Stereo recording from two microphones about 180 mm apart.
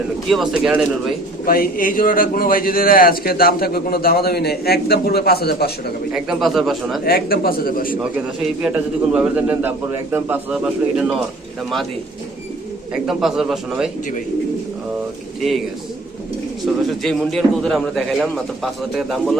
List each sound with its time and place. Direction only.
0.3 s a man's voice: centre (ahead or behind)
1.5 s a man's voice: 55° left (ahead or behind)
6.1 s a man's voice: centre (ahead or behind)
7.0 s a man's voice: 55° left (ahead or behind)
8.6 s a man's voice: 5° right (ahead or behind)
12.9 s a man's voice: 5° right (ahead or behind)
17.0 s a man's voice: centre (ahead or behind)